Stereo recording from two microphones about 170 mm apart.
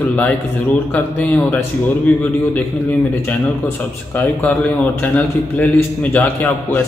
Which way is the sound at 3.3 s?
10° left (ahead or behind).